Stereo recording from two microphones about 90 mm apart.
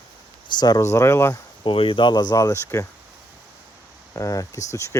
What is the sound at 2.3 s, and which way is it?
Speech, 40° left (ahead or behind).